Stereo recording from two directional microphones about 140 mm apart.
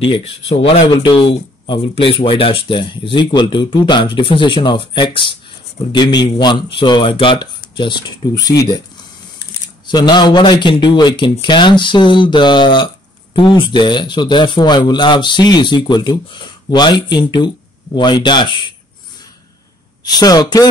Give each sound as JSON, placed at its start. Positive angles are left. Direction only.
{"t": 0.0, "sound": "speech", "side_deg": 40}
{"t": 9.8, "sound": "speech", "side_deg": 30}
{"t": 20.0, "sound": "speech", "side_deg": 30}